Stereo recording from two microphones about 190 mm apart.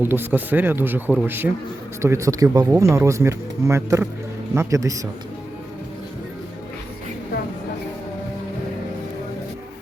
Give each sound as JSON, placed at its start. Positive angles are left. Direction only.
{"t": 0.0, "sound": "speech", "side_deg": -10}